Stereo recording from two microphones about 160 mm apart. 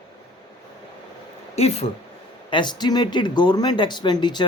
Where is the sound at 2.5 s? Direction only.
30° left (ahead or behind).